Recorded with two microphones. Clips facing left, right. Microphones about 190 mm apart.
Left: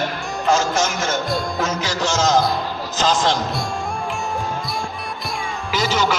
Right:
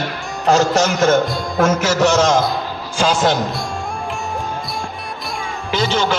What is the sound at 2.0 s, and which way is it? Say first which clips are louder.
Speech: right 4 dB; 60° right (ahead or behind).